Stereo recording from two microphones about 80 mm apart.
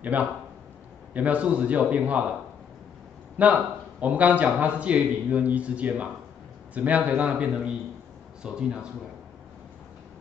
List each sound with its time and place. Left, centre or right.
0.0 s a man's voice: centre
3.4 s a man's voice: centre